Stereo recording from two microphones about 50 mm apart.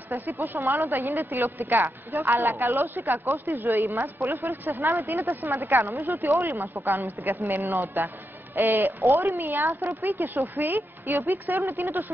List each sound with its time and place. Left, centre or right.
0.4 s a woman's voice: right
6.5 s a woman's voice: right
6.8 s a woman's voice: right